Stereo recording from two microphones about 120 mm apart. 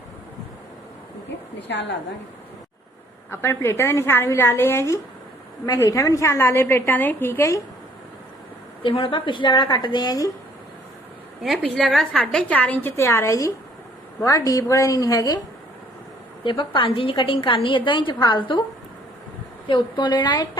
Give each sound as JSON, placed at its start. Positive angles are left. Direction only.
{"t": 3.2, "sound": "a woman's voice", "side_deg": 20}
{"t": 8.8, "sound": "a woman's voice", "side_deg": 45}
{"t": 11.4, "sound": "a woman's voice", "side_deg": 0}
{"t": 13.0, "sound": "a woman's voice", "side_deg": 25}
{"t": 16.4, "sound": "a woman's voice", "side_deg": 45}
{"t": 19.6, "sound": "a woman's voice", "side_deg": 40}